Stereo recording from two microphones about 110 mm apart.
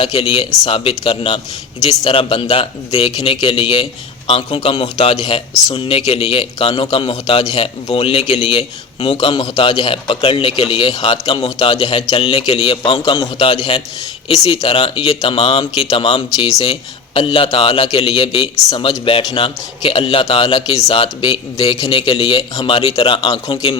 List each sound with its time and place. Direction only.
0.0 s a man's voice: 65° left (ahead or behind)
12.7 s a man's voice: 55° left (ahead or behind)
14.3 s a man's voice: 70° left (ahead or behind)
17.2 s a man's voice: 55° left (ahead or behind)
20.4 s speech: 40° left (ahead or behind)
20.8 s a man's voice: 55° left (ahead or behind)